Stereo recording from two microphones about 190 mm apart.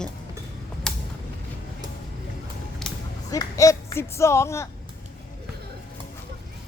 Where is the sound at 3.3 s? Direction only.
15° left (ahead or behind).